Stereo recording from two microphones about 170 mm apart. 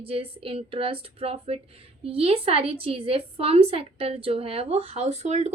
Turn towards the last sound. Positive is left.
turn(degrees=-40)  # may be behind; listen again after turning